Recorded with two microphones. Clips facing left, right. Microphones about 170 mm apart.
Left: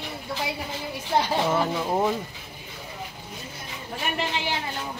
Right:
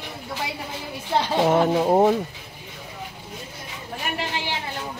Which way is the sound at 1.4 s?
50° right (ahead or behind).